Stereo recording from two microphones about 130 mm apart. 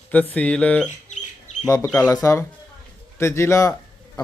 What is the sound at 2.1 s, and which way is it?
Speech, 25° left (ahead or behind).